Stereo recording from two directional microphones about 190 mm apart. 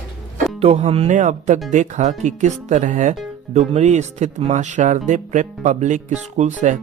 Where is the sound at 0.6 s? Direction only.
30° right (ahead or behind).